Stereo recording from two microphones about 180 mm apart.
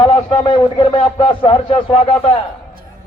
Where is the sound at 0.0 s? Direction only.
30° left (ahead or behind).